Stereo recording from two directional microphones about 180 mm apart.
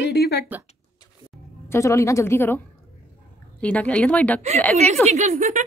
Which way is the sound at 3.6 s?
5° left (ahead or behind).